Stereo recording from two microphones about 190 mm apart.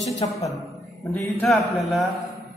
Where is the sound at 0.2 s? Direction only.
25° left (ahead or behind).